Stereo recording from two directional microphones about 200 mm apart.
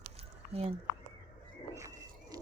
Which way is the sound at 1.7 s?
15° right (ahead or behind).